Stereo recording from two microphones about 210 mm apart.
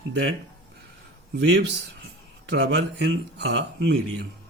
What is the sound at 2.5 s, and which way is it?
Speech, 55° right (ahead or behind).